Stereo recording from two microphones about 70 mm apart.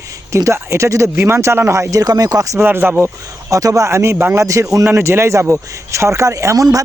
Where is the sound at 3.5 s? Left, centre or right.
Right.